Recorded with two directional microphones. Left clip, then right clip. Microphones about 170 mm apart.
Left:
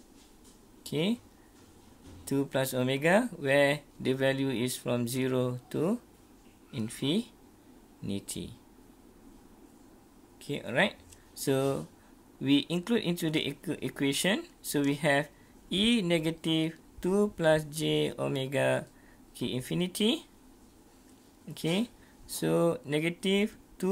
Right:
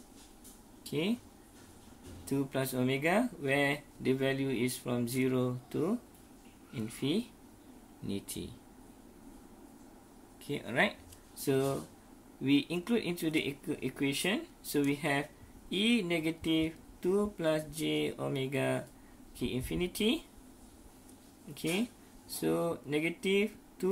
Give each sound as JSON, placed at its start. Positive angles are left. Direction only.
{"t": 0.8, "sound": "speech", "side_deg": 50}
{"t": 2.2, "sound": "speech", "side_deg": 55}
{"t": 8.1, "sound": "speech", "side_deg": 45}
{"t": 10.4, "sound": "speech", "side_deg": 40}
{"t": 21.5, "sound": "speech", "side_deg": 55}